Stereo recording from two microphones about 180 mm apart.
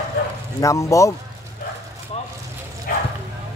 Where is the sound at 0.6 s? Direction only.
15° left (ahead or behind).